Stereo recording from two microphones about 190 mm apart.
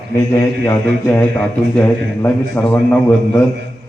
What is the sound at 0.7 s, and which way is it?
A man's voice, 10° left (ahead or behind).